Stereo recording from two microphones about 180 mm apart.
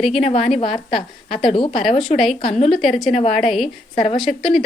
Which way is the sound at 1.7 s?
Centre (ahead or behind).